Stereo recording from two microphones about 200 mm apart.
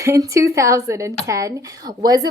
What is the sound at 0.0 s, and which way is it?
Speech, 15° right (ahead or behind).